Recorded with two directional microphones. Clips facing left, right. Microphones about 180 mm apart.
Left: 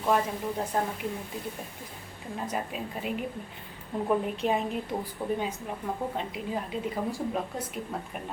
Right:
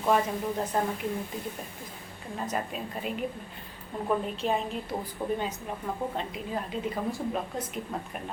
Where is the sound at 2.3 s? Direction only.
5° left (ahead or behind).